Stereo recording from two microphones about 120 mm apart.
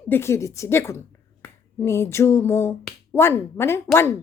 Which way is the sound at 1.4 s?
20° left (ahead or behind).